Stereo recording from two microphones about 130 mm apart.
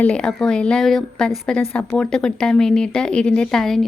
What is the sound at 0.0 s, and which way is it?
A woman's voice, 5° left (ahead or behind).